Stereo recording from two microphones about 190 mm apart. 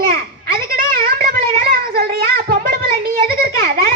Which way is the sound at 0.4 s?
55° right (ahead or behind).